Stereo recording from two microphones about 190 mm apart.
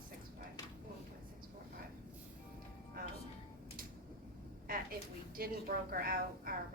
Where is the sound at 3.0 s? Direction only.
50° right (ahead or behind).